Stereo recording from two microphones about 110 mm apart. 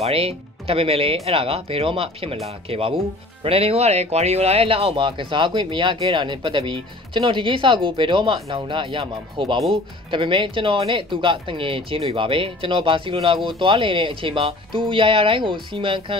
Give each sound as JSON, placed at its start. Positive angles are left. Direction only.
{"t": 0.0, "sound": "speech", "side_deg": -60}